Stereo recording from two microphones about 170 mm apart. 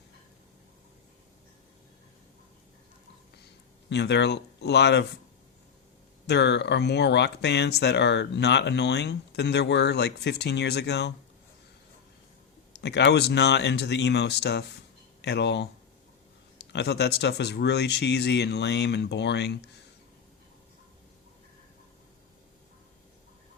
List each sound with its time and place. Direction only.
3.8 s speech: 90° left
6.2 s speech: 90° left
12.8 s speech: 90° left
16.6 s speech: 80° left